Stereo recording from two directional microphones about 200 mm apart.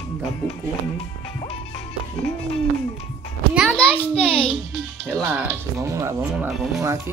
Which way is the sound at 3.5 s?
5° left (ahead or behind).